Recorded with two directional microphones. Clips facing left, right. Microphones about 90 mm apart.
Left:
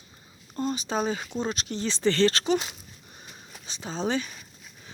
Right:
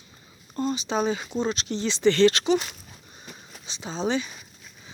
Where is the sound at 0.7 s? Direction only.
45° left (ahead or behind).